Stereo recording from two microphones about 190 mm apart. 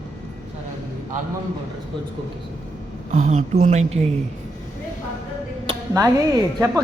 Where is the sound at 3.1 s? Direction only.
40° right (ahead or behind).